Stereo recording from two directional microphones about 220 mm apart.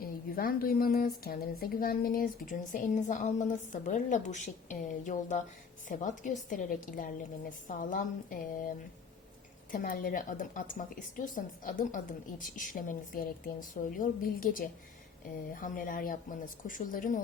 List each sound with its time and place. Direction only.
0.0 s a woman's voice: 40° left (ahead or behind)
9.7 s a woman's voice: 40° left (ahead or behind)